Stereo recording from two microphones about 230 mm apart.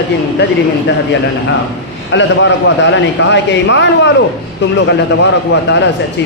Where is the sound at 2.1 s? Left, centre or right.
Left.